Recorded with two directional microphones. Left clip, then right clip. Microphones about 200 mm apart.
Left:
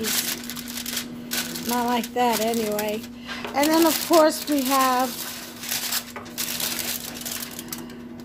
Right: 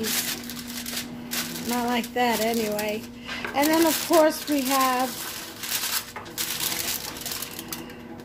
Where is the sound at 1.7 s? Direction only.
10° left (ahead or behind).